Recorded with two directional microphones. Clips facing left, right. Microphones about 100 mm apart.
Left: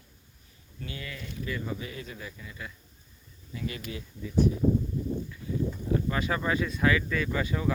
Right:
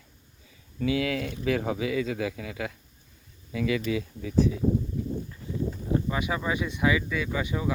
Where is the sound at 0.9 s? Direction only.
85° right.